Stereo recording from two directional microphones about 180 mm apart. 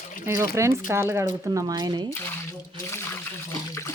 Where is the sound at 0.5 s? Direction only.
15° right (ahead or behind).